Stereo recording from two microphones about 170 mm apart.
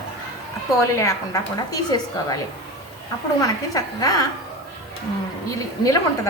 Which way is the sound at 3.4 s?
20° left (ahead or behind).